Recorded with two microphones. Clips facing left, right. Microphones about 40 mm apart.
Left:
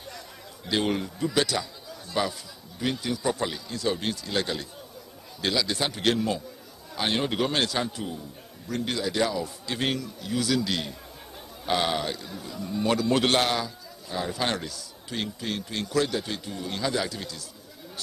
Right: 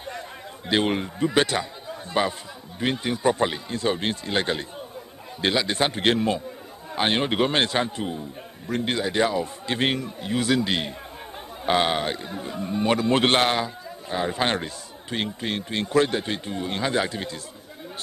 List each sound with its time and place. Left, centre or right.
0.7 s a man's voice: right